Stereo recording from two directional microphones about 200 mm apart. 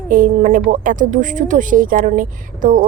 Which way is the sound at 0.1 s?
45° right (ahead or behind).